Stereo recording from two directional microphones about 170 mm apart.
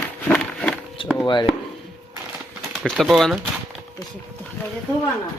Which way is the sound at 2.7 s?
Centre (ahead or behind).